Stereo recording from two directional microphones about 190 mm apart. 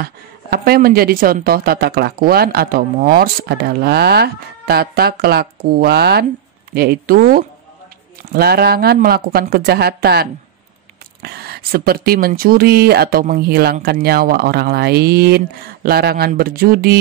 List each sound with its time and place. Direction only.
0.0 s speech: 55° right (ahead or behind)
11.2 s speech: 55° right (ahead or behind)